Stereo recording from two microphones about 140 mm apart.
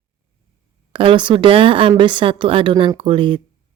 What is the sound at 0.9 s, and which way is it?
Speech, 35° right (ahead or behind).